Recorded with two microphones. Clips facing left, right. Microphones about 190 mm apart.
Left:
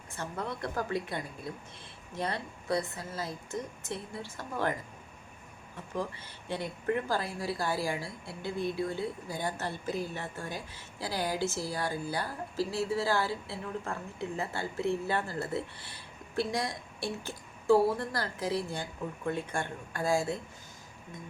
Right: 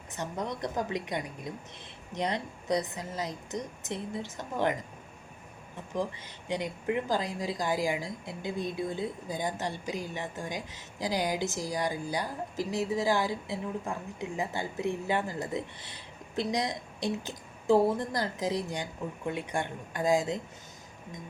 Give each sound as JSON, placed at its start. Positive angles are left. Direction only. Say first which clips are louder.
{"t": 0.1, "sound": "speech", "louder": "right 2 dB", "side_deg": -15}
{"t": 5.9, "sound": "speech", "louder": "right 3 dB", "side_deg": -15}